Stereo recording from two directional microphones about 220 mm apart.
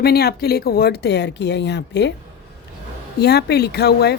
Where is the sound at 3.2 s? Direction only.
45° left (ahead or behind).